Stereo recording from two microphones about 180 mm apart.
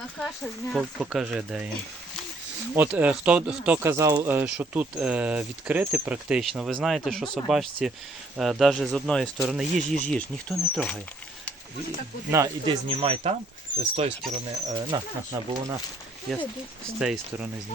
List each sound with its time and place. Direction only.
0.2 s speech: centre (ahead or behind)
2.7 s speech: 10° right (ahead or behind)
12.3 s speech: 15° right (ahead or behind)
12.9 s speech: 30° right (ahead or behind)
14.7 s speech: 20° right (ahead or behind)
17.0 s speech: centre (ahead or behind)